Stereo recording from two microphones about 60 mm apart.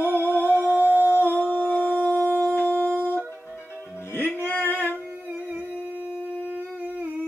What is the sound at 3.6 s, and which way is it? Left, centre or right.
Music, left.